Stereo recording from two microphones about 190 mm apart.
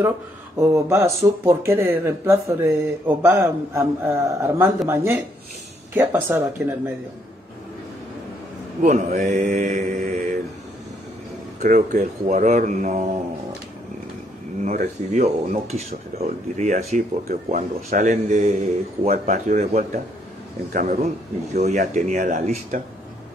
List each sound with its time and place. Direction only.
0.6 s speech: 15° right (ahead or behind)
8.8 s speech: 40° right (ahead or behind)
11.6 s speech: 45° right (ahead or behind)
14.6 s speech: 40° right (ahead or behind)